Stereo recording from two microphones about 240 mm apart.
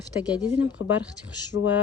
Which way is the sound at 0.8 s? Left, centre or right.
Left.